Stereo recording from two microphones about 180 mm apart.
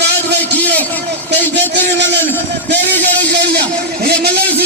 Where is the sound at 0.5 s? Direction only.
10° left (ahead or behind).